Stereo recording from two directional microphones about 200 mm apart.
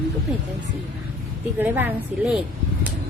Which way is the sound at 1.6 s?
10° right (ahead or behind).